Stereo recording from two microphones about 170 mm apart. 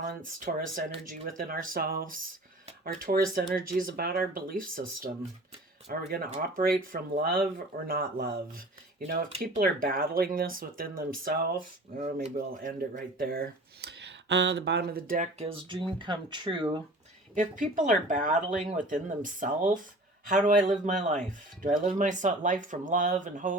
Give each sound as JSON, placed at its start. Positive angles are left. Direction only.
{"t": 0.0, "sound": "speech", "side_deg": -50}
{"t": 15.4, "sound": "speech", "side_deg": -30}
{"t": 17.3, "sound": "speech", "side_deg": -50}